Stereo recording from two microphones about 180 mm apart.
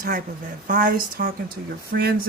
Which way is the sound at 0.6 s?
50° right (ahead or behind).